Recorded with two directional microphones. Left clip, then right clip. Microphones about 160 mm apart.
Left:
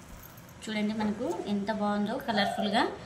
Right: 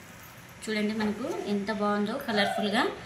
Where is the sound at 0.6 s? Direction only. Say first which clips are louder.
Right 3 dB; 20° left (ahead or behind).